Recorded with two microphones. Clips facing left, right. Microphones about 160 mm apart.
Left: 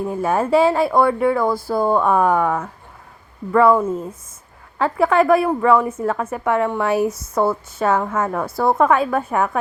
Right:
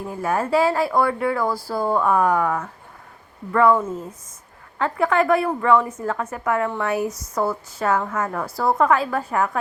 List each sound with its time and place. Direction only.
0.1 s speech: 25° left (ahead or behind)